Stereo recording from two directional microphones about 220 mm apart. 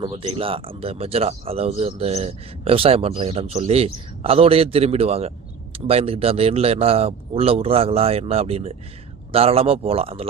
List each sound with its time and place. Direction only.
0.0 s speech: 25° right (ahead or behind)